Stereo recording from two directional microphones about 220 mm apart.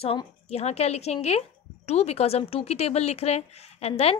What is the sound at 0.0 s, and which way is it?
A woman's voice, 25° left (ahead or behind).